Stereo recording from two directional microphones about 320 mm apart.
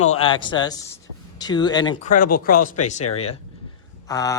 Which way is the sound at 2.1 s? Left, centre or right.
Left.